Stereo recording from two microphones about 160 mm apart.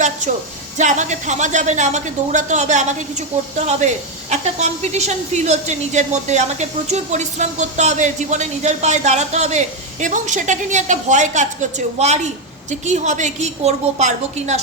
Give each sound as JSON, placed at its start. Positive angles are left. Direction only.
{"t": 0.2, "sound": "a woman's voice", "side_deg": -50}